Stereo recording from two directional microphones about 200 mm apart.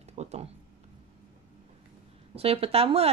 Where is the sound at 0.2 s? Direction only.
35° right (ahead or behind).